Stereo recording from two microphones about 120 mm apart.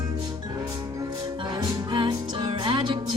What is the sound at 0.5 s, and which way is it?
Music, 30° right (ahead or behind).